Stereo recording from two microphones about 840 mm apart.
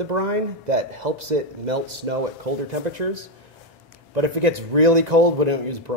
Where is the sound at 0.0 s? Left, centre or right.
Right.